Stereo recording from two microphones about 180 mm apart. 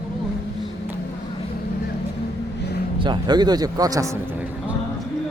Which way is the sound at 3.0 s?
25° right (ahead or behind).